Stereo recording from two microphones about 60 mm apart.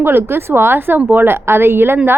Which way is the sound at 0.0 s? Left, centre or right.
Right.